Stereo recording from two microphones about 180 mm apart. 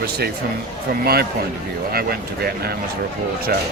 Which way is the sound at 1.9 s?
60° right (ahead or behind).